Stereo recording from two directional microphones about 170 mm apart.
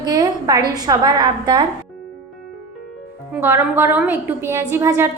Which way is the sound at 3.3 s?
15° right (ahead or behind).